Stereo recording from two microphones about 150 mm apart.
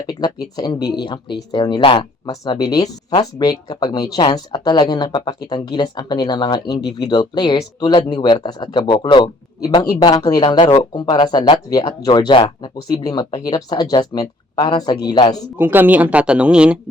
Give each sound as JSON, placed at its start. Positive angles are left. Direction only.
{"t": 0.2, "sound": "a sound", "side_deg": 30}
{"t": 0.5, "sound": "speech", "side_deg": 25}
{"t": 0.8, "sound": "speech", "side_deg": 90}
{"t": 1.5, "sound": "speech", "side_deg": 30}
{"t": 15.5, "sound": "speech", "side_deg": -15}